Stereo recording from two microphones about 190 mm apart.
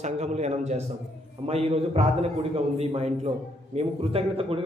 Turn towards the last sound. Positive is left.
turn(degrees=-30)  # may be behind; listen again after turning